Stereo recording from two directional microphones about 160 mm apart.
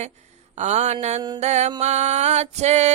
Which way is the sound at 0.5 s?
45° right (ahead or behind).